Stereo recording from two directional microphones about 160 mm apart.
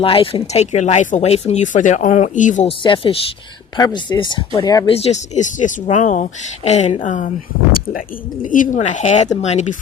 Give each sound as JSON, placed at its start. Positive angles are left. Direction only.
{"t": 0.0, "sound": "speech", "side_deg": 35}
{"t": 2.6, "sound": "speech", "side_deg": 30}
{"t": 4.9, "sound": "speech", "side_deg": 40}